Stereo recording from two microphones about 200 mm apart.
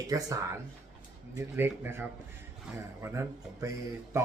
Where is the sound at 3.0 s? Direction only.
15° right (ahead or behind).